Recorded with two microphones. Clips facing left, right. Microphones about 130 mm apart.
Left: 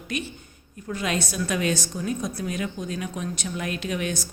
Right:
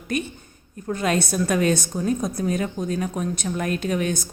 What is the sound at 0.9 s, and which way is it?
A woman's voice, 45° right (ahead or behind).